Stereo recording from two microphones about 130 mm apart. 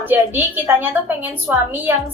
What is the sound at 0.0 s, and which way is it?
A woman's voice, 15° right (ahead or behind).